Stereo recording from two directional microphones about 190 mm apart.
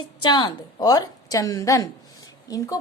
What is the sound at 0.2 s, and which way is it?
A woman's voice, 20° left (ahead or behind).